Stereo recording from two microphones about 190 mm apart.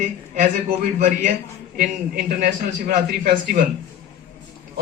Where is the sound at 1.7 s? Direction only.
50° right (ahead or behind).